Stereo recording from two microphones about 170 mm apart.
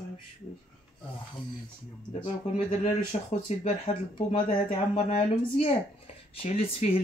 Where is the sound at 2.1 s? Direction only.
35° left (ahead or behind).